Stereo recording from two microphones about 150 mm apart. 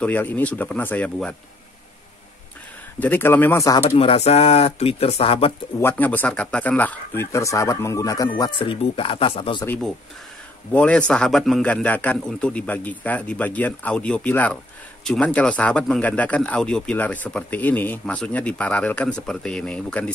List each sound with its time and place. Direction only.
0.0 s speech: 10° left (ahead or behind)
3.0 s speech: 15° left (ahead or behind); by 5.5 s 40° left (ahead or behind)
5.8 s speech: 15° left (ahead or behind); by 9.7 s 35° left (ahead or behind)
10.7 s speech: 10° left (ahead or behind)